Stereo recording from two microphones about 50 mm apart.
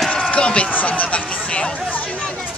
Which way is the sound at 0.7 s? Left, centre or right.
Left.